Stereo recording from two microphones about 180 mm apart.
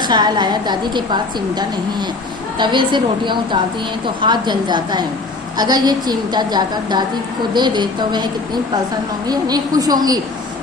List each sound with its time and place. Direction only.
0.0 s a woman's voice: 25° right (ahead or behind)